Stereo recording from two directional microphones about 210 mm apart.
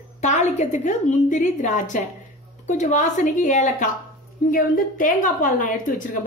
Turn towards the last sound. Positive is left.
turn(degrees=40)  # may be behind; listen again after turning